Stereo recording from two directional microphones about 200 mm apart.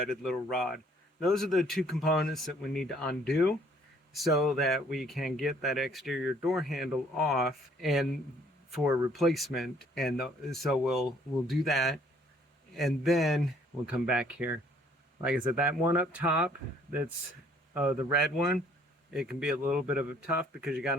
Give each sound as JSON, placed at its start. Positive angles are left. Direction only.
{"t": 0.1, "sound": "speech", "side_deg": 0}
{"t": 9.1, "sound": "speech", "side_deg": 0}
{"t": 17.7, "sound": "speech", "side_deg": -5}